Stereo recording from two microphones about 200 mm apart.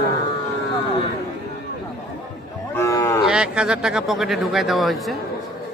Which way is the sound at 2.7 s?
15° left (ahead or behind).